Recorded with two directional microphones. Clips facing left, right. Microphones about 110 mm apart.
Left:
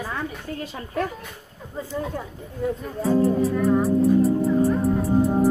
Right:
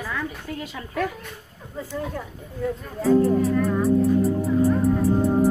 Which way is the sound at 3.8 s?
Centre (ahead or behind).